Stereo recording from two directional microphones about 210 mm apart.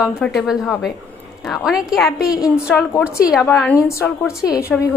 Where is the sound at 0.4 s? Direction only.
Centre (ahead or behind).